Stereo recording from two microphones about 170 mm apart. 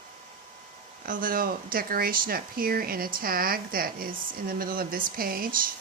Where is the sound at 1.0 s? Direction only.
55° right (ahead or behind).